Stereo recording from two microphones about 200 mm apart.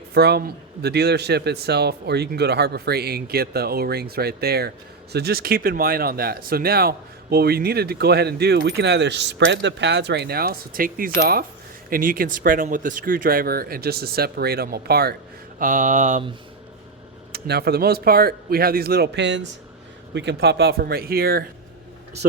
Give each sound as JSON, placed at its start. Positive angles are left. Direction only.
{"t": 0.1, "sound": "speech", "side_deg": -55}
{"t": 15.5, "sound": "mantra", "side_deg": -40}
{"t": 17.3, "sound": "speech", "side_deg": -50}